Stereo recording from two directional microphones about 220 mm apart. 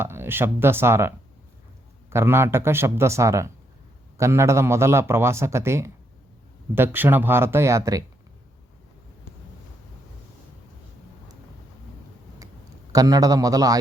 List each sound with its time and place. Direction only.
0.0 s speech: 10° right (ahead or behind)
12.9 s speech: 15° right (ahead or behind)